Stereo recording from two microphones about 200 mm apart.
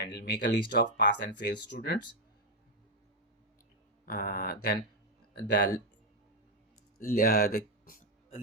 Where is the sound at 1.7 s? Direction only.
55° left (ahead or behind).